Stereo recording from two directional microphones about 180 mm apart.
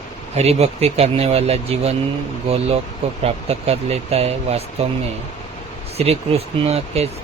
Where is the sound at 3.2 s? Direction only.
35° right (ahead or behind).